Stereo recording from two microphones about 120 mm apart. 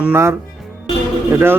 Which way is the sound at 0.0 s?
20° right (ahead or behind).